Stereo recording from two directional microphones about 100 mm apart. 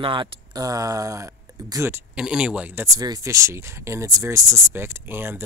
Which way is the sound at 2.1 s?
10° right (ahead or behind).